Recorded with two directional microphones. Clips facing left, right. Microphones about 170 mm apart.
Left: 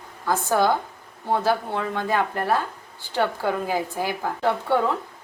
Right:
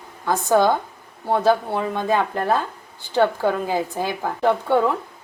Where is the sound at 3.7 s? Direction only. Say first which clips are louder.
Right 2 dB; 20° right (ahead or behind).